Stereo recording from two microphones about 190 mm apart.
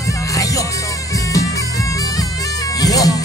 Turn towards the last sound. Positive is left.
turn(degrees=20)  # may be behind; listen again after turning